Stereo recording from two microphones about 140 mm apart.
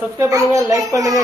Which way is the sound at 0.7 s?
25° right (ahead or behind).